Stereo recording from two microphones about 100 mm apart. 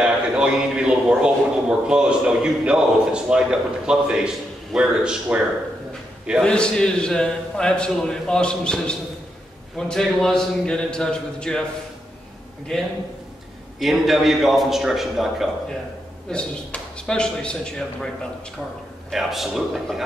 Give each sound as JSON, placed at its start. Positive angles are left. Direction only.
{"t": 0.0, "sound": "a man's voice", "side_deg": -10}
{"t": 6.4, "sound": "a man's voice", "side_deg": 10}
{"t": 12.7, "sound": "a man's voice", "side_deg": 5}
{"t": 16.3, "sound": "a man's voice", "side_deg": 10}
{"t": 19.0, "sound": "a man's voice", "side_deg": 0}